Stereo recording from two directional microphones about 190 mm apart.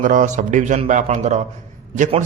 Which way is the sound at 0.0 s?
45° right (ahead or behind).